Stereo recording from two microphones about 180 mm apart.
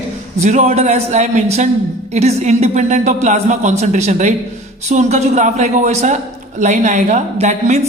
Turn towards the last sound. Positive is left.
turn(degrees=-40)  # may be behind; listen again after turning